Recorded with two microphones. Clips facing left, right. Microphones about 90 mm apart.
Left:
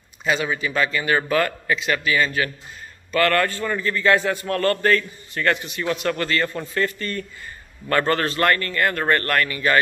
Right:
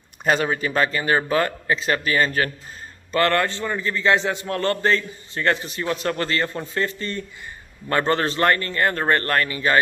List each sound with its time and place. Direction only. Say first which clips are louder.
0.2 s a man's voice: right 2 dB; 45° right (ahead or behind)
3.1 s a man's voice: even; 25° right (ahead or behind)